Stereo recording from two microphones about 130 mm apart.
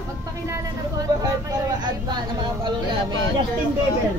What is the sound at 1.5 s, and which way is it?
Speech, 35° right (ahead or behind).